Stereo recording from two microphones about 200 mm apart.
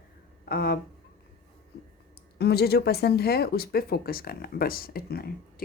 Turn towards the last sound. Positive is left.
turn(degrees=50)  # may be behind; listen again after turning